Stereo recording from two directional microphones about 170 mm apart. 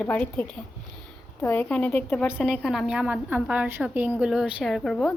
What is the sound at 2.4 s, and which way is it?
A woman's voice, centre (ahead or behind).